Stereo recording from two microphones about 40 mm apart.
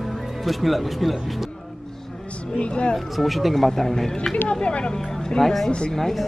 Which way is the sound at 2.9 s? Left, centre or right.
Centre.